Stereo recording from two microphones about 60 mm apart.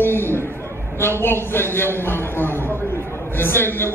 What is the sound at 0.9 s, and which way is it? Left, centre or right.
A man's voice, left.